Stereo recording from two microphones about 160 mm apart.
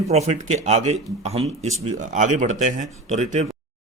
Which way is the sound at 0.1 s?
45° right (ahead or behind).